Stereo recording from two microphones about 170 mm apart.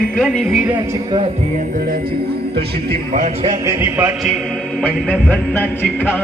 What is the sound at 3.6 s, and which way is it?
Speech, 15° right (ahead or behind).